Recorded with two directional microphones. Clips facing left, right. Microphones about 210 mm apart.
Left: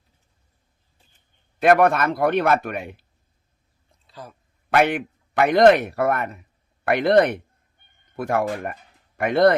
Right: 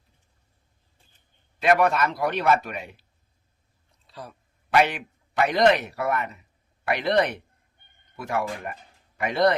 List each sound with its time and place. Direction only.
1.6 s speech: 55° left (ahead or behind)
4.0 s a sound: centre (ahead or behind)
4.7 s speech: 55° left (ahead or behind)